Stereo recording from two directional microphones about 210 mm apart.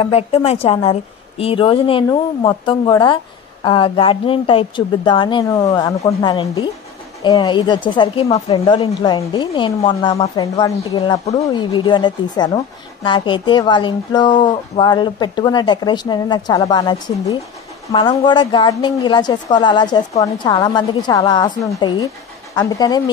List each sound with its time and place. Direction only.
0.0 s a woman's voice: 30° left (ahead or behind)